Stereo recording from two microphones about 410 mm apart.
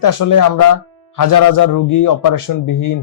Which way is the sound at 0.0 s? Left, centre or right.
Left.